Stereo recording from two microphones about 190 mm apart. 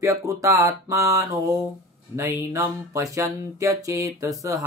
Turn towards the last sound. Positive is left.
turn(degrees=-15)  # may be behind; listen again after turning